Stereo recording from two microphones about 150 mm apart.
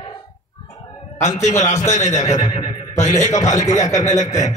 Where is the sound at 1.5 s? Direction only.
20° left (ahead or behind).